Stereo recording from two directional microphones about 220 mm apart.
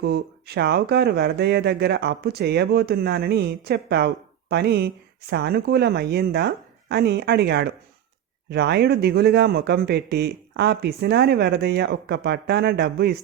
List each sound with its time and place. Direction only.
0.0 s speech: 45° right (ahead or behind)